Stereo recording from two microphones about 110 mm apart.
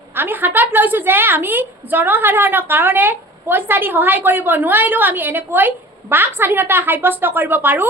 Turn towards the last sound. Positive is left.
turn(degrees=-15)  # may be behind; listen again after turning